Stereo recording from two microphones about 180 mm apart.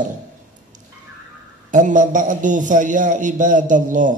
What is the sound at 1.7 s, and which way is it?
Mantra, 45° right (ahead or behind).